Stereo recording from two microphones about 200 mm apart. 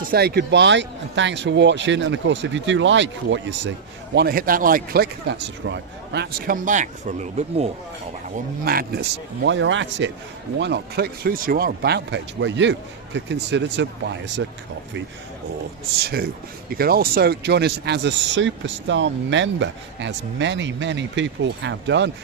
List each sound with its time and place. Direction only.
0.0 s speech: 50° right (ahead or behind)
4.1 s a man's voice: 55° right (ahead or behind); by 7.7 s 35° right (ahead or behind)
8.6 s speech: 50° right (ahead or behind); by 10.1 s 70° right (ahead or behind)
10.6 s a man's voice: 55° right (ahead or behind)
16.6 s speech: 50° right (ahead or behind)